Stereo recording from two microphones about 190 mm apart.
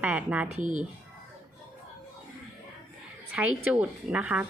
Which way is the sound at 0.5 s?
40° right (ahead or behind).